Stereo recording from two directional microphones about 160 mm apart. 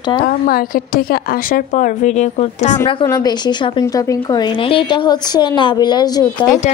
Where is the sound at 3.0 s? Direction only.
25° left (ahead or behind).